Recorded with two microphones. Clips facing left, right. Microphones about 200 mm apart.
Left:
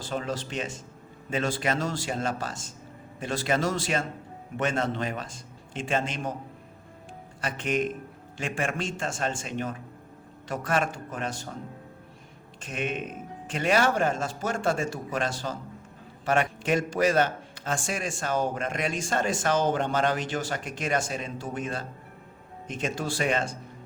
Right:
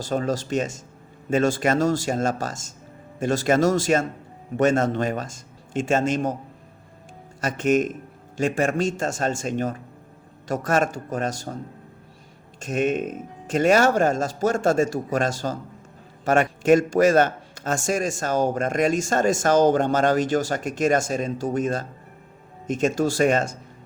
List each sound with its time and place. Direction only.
0.0 s a man's voice: 40° right (ahead or behind)
7.4 s a man's voice: 45° right (ahead or behind)
12.5 s a man's voice: 45° right (ahead or behind)